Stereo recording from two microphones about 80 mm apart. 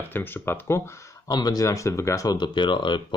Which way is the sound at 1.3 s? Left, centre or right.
Left.